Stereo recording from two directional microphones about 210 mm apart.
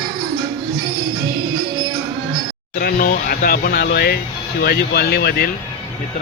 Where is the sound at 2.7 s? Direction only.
45° left (ahead or behind).